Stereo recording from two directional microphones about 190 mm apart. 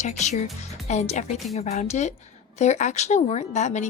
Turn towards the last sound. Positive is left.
turn(degrees=35)  # may be behind; listen again after turning